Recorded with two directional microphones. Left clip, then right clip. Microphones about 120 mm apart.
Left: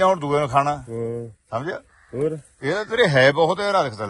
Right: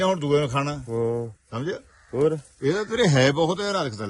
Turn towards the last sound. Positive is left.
turn(degrees=-20)  # may be behind; listen again after turning